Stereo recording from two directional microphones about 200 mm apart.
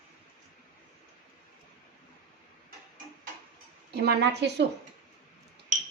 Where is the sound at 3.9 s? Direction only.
55° right (ahead or behind).